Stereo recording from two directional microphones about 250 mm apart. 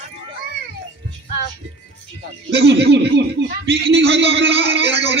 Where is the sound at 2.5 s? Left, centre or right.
Right.